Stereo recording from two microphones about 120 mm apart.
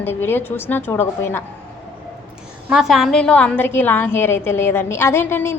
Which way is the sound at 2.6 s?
5° right (ahead or behind).